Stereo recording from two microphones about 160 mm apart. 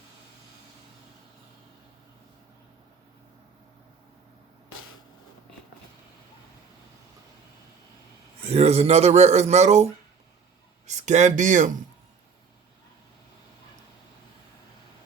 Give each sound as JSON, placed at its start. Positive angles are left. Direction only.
{"t": 8.4, "sound": "speech", "side_deg": -40}